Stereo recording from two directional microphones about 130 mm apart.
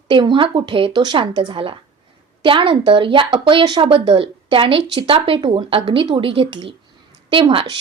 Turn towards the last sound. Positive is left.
turn(degrees=-40)  # may be behind; listen again after turning